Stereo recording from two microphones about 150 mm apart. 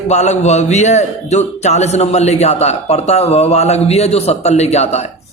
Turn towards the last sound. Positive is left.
turn(degrees=45)  # may be behind; listen again after turning